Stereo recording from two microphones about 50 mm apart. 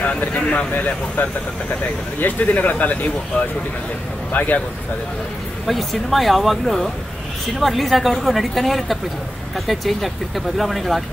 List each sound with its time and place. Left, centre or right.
0.2 s speech: left
5.7 s a woman's voice: centre